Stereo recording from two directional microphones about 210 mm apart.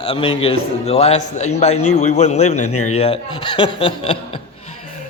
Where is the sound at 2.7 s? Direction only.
90° left.